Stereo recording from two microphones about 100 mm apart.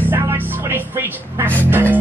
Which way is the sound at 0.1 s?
20° right (ahead or behind).